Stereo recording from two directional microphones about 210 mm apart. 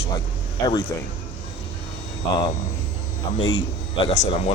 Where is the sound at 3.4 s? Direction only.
70° left (ahead or behind).